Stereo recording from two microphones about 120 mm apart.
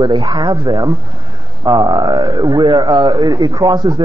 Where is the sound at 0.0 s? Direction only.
40° right (ahead or behind).